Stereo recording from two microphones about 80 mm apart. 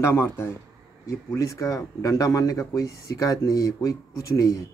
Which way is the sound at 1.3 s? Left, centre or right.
Left.